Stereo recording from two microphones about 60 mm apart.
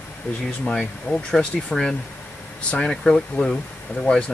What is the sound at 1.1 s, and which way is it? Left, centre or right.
Speech, centre.